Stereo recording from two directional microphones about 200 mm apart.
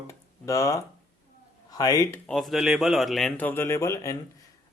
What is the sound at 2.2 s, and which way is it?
Speech, centre (ahead or behind).